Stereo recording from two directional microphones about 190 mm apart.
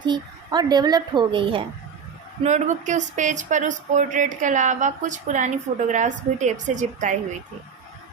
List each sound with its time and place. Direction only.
0.0 s a woman's voice: 25° right (ahead or behind)
2.4 s speech: 40° right (ahead or behind)